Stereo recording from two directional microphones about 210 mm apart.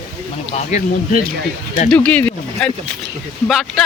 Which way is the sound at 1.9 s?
5° left (ahead or behind).